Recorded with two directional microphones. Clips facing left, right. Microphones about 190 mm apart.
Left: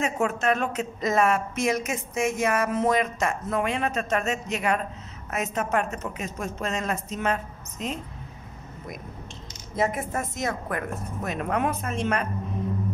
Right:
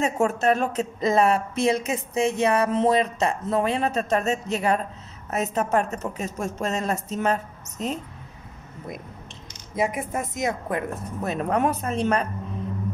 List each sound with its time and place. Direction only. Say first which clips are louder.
0.0 s speech: right 3 dB; 40° right (ahead or behind)
9.8 s a woman's voice: right 1 dB; 15° right (ahead or behind)
11.2 s speech: right 3 dB; 35° right (ahead or behind)